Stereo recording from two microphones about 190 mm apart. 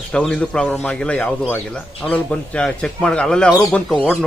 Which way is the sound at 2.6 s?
5° left (ahead or behind).